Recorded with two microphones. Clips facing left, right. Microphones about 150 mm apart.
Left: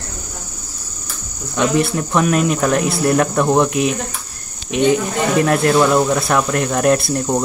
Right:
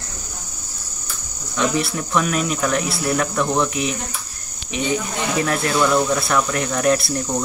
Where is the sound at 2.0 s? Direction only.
35° left (ahead or behind).